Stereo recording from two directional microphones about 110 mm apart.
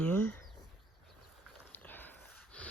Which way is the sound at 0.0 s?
15° left (ahead or behind).